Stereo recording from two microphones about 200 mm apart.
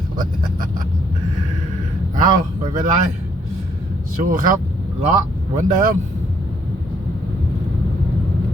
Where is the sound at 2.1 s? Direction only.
45° right (ahead or behind).